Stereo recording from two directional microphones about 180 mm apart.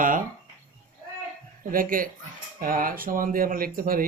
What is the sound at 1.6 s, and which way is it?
Speech, 50° right (ahead or behind).